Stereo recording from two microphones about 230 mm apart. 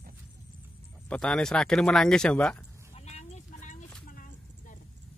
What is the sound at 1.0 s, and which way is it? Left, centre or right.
Speech, centre.